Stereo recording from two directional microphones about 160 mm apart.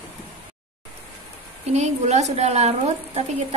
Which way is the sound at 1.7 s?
45° right (ahead or behind).